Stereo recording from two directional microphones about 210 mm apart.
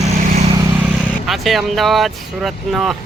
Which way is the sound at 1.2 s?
Centre (ahead or behind).